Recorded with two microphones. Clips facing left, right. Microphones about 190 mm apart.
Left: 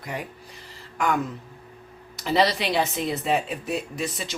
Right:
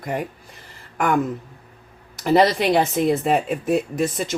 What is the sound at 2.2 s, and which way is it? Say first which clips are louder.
Speech: right 6 dB; 50° right (ahead or behind).